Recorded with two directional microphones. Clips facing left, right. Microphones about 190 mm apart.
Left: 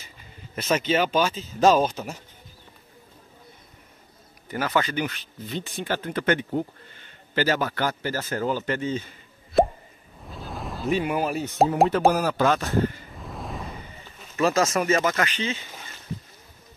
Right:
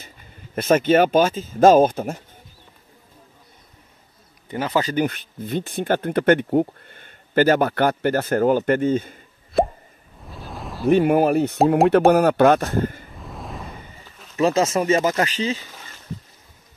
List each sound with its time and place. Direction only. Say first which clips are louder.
0.6 s speech: right 7 dB; 50° right (ahead or behind)
4.5 s speech: right 3 dB; 25° right (ahead or behind)
4.8 s speech: right 7 dB; 50° right (ahead or behind)
9.6 s plop: even; centre (ahead or behind)
10.2 s a sound: even; centre (ahead or behind)
10.9 s speech: right 9 dB; 55° right (ahead or behind)
13.1 s a sound: even; centre (ahead or behind)
14.3 s speech: right 3 dB; 25° right (ahead or behind)